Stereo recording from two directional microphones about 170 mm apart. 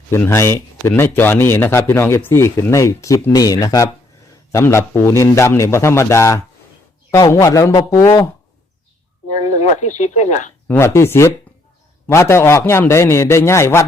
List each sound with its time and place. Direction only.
0.1 s speech: 15° left (ahead or behind)
9.3 s speech: 45° left (ahead or behind)
10.7 s speech: 15° left (ahead or behind)